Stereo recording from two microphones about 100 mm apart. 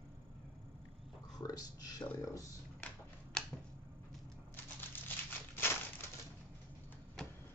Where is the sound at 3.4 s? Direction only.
5° left (ahead or behind).